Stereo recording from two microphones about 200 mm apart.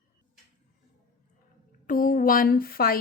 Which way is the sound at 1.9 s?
45° left (ahead or behind).